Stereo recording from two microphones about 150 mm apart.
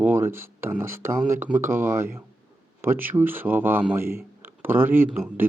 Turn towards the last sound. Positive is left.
turn(degrees=-15)  # may be behind; listen again after turning